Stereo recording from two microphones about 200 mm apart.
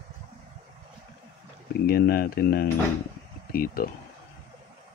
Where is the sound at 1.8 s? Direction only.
50° left (ahead or behind).